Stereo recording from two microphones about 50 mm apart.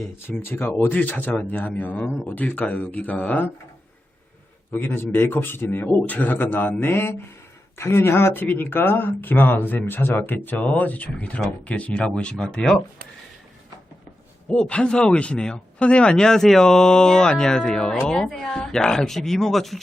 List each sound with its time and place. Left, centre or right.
0.3 s speech: centre
0.6 s speech: left
4.7 s a man's voice: left
7.8 s a man's voice: left
10.6 s speech: left
14.5 s speech: left; by 19.8 s centre